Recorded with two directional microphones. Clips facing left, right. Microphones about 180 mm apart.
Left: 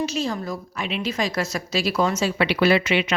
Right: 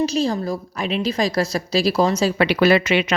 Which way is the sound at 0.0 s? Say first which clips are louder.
Right 5 dB; 35° right (ahead or behind).